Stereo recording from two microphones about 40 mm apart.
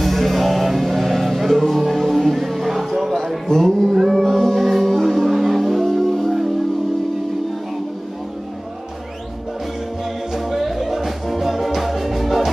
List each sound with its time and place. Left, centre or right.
0.0 s music: centre
10.3 s music: centre